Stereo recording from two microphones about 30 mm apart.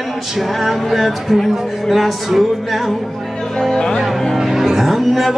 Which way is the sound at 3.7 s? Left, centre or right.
Left.